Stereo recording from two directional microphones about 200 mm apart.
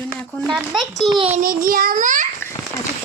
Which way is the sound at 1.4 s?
45° right (ahead or behind).